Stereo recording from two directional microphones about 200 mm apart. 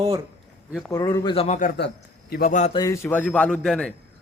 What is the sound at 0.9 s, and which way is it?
Speech, 15° left (ahead or behind).